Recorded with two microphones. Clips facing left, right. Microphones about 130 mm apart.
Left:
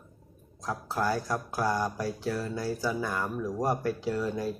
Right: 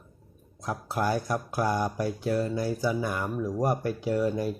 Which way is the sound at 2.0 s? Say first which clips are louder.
Right 3 dB; 55° right (ahead or behind).